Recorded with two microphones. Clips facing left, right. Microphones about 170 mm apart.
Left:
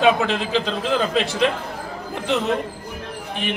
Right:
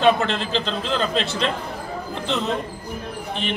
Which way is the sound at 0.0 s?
10° left (ahead or behind).